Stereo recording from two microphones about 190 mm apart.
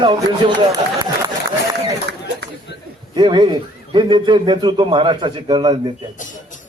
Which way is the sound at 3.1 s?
25° right (ahead or behind).